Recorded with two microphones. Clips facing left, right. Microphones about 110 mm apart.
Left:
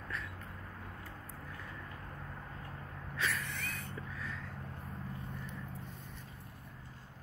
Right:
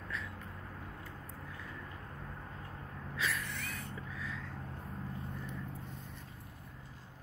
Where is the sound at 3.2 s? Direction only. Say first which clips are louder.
Even; centre (ahead or behind).